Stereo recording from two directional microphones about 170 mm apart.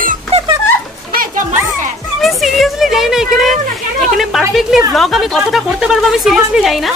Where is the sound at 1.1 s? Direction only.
55° right (ahead or behind).